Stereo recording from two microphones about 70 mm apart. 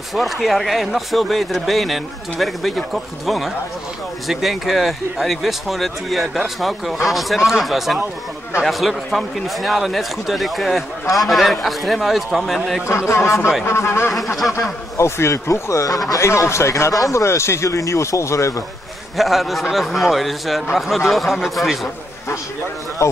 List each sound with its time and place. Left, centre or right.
0.1 s a man's voice: centre
12.8 s speech: left
14.1 s a man's voice: centre
15.0 s speech: left
16.2 s speech: left
19.1 s a man's voice: centre